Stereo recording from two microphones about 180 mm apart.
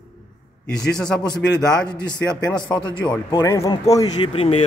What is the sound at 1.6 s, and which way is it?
Speech, 25° left (ahead or behind).